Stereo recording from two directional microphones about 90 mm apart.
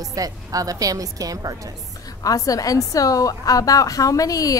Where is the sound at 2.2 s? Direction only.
40° left (ahead or behind).